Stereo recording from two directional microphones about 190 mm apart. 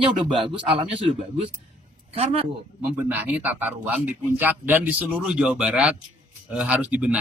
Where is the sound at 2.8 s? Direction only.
10° right (ahead or behind).